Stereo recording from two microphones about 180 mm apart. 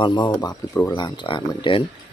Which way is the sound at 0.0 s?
25° left (ahead or behind).